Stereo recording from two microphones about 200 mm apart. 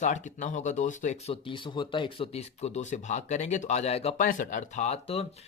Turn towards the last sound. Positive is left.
turn(degrees=30)  # may be behind; listen again after turning